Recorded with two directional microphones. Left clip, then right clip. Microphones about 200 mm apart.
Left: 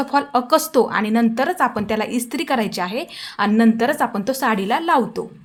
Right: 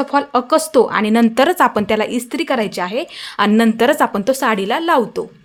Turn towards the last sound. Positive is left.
turn(degrees=-15)  # may be behind; listen again after turning